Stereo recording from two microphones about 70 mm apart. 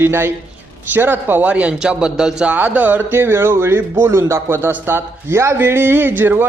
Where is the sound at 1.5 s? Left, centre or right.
Centre.